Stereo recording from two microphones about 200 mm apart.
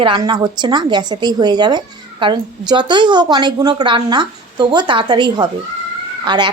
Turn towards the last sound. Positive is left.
turn(degrees=-20)  # may be behind; listen again after turning